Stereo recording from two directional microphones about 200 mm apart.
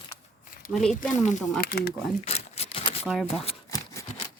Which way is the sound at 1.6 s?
50° left (ahead or behind).